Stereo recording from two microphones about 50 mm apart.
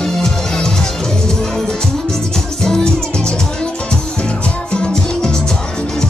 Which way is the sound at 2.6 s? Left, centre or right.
Centre.